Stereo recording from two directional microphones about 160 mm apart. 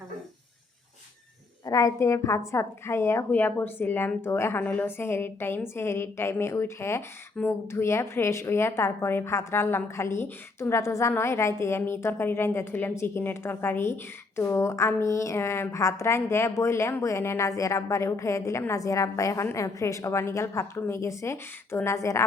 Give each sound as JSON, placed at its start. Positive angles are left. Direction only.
{"t": 1.6, "sound": "a woman's voice", "side_deg": 20}